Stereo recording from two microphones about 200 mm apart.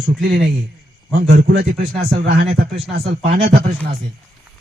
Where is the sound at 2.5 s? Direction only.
30° right (ahead or behind).